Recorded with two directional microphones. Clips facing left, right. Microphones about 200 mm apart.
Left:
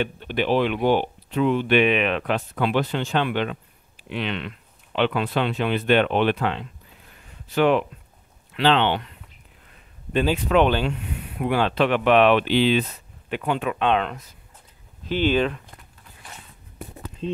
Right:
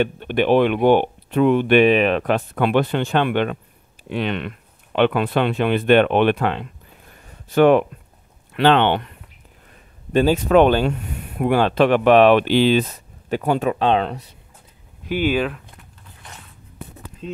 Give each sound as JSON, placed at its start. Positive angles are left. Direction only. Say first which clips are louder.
{"t": 0.0, "sound": "speech", "louder": "right 5 dB", "side_deg": -55}
{"t": 1.9, "sound": "speech", "louder": "right 5 dB", "side_deg": -40}
{"t": 10.1, "sound": "speech", "louder": "right 5 dB", "side_deg": -45}
{"t": 15.0, "sound": "speech", "louder": "right 1 dB", "side_deg": -10}